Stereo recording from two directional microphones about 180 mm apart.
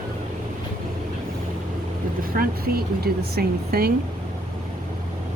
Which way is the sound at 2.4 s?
60° right (ahead or behind).